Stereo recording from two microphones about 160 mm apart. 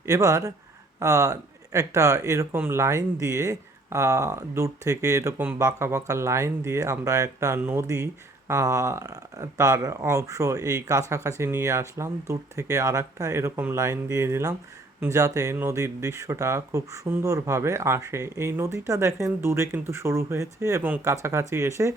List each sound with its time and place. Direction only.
0.0 s speech: 20° right (ahead or behind)